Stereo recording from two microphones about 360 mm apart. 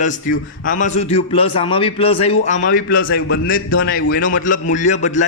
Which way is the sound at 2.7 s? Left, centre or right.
Left.